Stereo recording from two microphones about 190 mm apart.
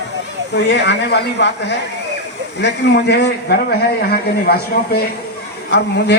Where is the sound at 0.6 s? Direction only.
65° left (ahead or behind).